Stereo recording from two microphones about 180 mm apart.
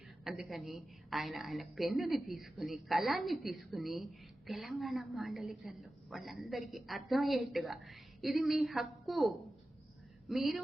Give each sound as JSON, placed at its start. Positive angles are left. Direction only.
{"t": 0.3, "sound": "a woman's voice", "side_deg": 0}